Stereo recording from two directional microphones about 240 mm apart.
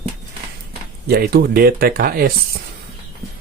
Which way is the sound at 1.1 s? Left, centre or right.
Right.